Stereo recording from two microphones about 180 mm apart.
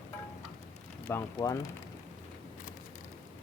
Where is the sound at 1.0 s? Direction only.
15° left (ahead or behind).